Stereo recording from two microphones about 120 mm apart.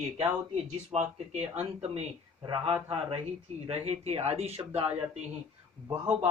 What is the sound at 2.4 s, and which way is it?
Speech, 45° right (ahead or behind).